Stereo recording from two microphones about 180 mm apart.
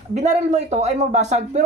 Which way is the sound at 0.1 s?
40° right (ahead or behind).